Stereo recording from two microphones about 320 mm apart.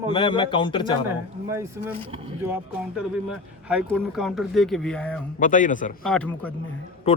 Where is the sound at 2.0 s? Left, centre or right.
Centre.